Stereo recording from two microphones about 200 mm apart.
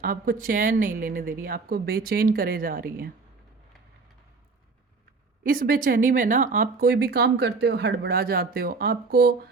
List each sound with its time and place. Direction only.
0.0 s speech: 45° right (ahead or behind)
5.5 s speech: 45° right (ahead or behind)